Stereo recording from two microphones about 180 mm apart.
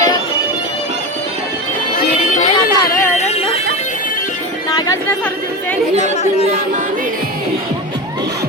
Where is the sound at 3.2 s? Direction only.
35° left (ahead or behind).